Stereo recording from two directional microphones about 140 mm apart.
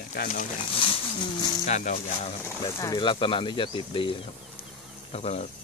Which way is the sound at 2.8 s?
30° left (ahead or behind).